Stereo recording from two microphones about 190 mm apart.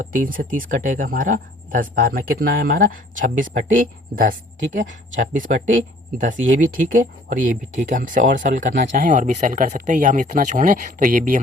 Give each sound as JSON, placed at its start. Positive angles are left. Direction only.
{"t": 0.0, "sound": "speech", "side_deg": -45}